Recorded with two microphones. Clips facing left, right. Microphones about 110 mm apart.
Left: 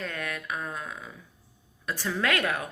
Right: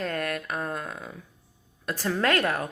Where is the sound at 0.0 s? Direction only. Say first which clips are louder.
Right 5 dB; 45° right (ahead or behind).